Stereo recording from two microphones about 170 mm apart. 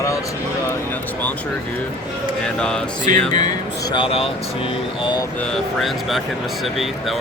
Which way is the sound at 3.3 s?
25° left (ahead or behind).